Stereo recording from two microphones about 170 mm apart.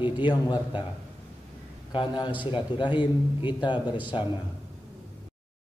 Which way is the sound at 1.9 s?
25° left (ahead or behind).